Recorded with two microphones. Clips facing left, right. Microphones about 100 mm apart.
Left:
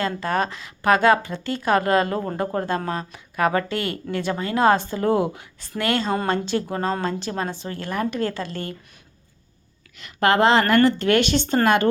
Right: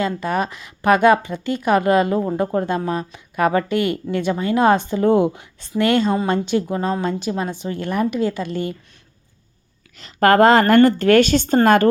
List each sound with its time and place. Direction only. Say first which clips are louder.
0.0 s a woman's voice: right 2 dB; 15° right (ahead or behind)
10.0 s speech: right 5 dB; 45° right (ahead or behind)